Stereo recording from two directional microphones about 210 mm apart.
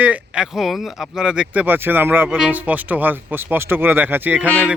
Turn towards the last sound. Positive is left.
turn(degrees=-10)  # may be behind; listen again after turning